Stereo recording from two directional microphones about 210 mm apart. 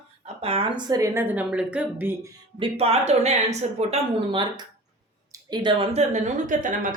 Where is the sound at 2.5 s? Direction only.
30° right (ahead or behind).